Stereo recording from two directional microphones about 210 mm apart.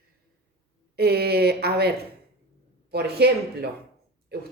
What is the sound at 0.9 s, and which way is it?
Speech, 50° right (ahead or behind).